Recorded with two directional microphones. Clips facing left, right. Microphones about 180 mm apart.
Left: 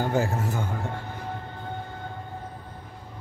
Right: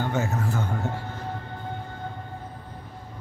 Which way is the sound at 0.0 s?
35° left (ahead or behind).